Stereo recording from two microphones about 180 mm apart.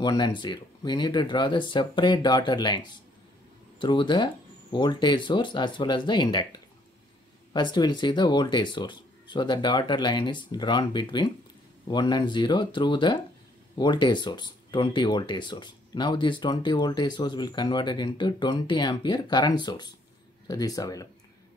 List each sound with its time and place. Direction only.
0.0 s speech: 25° left (ahead or behind)